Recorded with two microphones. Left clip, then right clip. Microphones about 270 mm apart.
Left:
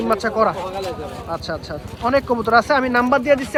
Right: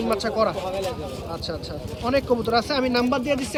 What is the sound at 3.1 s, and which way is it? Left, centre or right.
Speech, centre.